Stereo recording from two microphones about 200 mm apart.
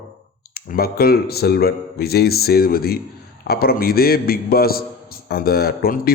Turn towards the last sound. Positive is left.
turn(degrees=45)  # may be behind; listen again after turning